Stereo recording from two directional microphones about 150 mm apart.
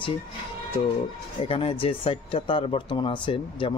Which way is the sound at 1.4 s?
40° left (ahead or behind).